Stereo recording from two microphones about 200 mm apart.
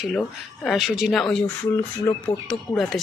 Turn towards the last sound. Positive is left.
turn(degrees=0)  # may be behind; listen again after turning